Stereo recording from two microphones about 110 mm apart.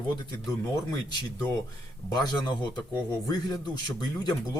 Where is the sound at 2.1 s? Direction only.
40° left (ahead or behind).